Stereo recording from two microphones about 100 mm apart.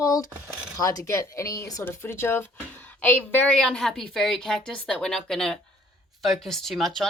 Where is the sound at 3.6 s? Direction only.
5° left (ahead or behind).